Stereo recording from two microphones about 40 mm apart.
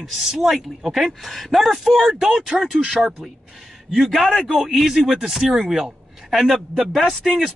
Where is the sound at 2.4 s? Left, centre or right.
Right.